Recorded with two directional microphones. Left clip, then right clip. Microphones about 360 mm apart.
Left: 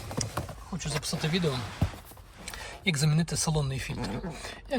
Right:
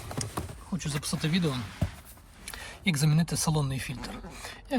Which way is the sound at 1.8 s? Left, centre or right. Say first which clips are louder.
Left 2 dB; left.